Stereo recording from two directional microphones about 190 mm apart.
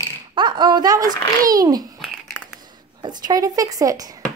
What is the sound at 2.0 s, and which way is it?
Crumpling, centre (ahead or behind).